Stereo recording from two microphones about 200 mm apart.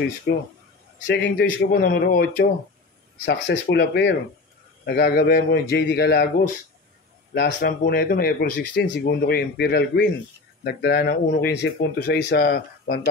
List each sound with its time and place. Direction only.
0.3 s a man's voice: 55° left (ahead or behind)